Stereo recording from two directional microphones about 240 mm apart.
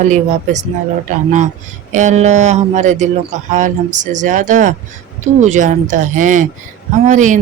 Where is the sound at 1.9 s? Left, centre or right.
Right.